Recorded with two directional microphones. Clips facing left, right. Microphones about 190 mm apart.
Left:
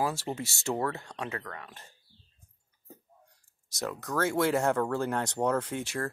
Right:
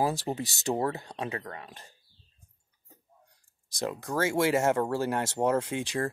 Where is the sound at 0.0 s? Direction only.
15° right (ahead or behind).